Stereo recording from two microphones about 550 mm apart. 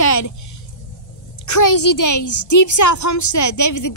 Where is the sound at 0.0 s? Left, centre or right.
Left.